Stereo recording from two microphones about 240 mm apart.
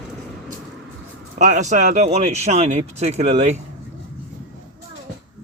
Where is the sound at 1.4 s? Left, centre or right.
Right.